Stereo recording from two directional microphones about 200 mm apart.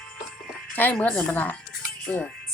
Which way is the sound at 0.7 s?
10° left (ahead or behind).